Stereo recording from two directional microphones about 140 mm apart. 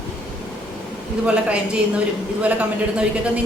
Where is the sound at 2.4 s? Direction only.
10° right (ahead or behind).